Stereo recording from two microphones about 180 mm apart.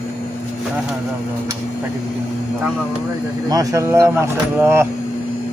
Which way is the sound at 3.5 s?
20° right (ahead or behind).